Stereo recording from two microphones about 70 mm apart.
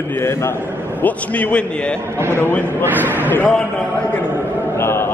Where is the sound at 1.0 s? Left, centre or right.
Left.